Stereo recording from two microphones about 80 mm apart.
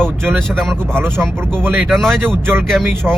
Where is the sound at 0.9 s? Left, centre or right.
Right.